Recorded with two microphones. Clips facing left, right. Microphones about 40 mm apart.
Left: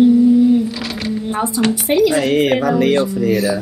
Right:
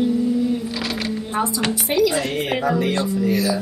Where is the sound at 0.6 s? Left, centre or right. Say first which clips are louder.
Left 3 dB; centre.